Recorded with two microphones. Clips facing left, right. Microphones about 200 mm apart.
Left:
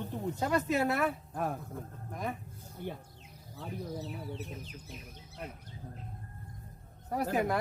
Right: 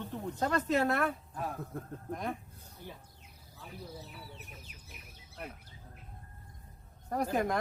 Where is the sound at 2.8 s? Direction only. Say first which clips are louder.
Left 8 dB; 55° left (ahead or behind).